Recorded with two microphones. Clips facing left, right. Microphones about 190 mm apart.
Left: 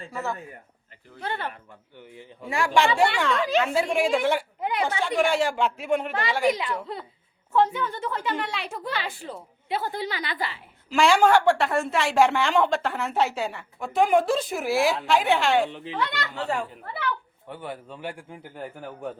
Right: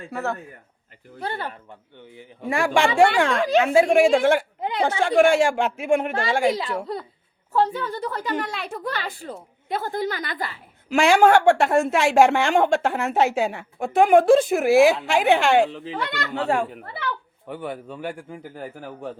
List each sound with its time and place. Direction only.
0.1 s a woman's voice: 65° right (ahead or behind)
1.2 s a woman's voice: 40° right (ahead or behind)
2.5 s a woman's voice: 55° right (ahead or behind)
4.6 s a woman's voice: 30° right (ahead or behind)
5.0 s a woman's voice: 50° right (ahead or behind)
6.5 s a woman's voice: 30° right (ahead or behind)
10.9 s a woman's voice: 55° right (ahead or behind)
15.7 s a woman's voice: 35° right (ahead or behind)
16.0 s a woman's voice: 55° right (ahead or behind); by 19.1 s 40° right (ahead or behind)